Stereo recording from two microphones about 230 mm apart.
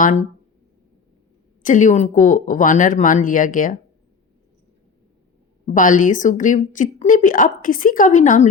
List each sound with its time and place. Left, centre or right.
0.0 s a woman's voice: left
1.6 s a woman's voice: left
5.6 s a woman's voice: left